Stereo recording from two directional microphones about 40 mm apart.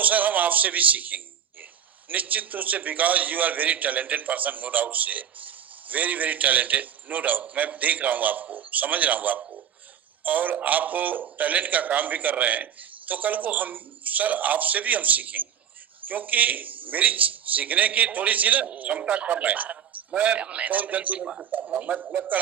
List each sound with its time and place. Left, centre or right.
0.0 s a man's voice: right
21.2 s a man's voice: right